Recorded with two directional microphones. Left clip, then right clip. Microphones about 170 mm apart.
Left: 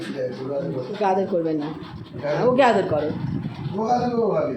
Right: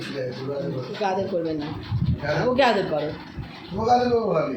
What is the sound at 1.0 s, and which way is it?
Speech, 15° left (ahead or behind).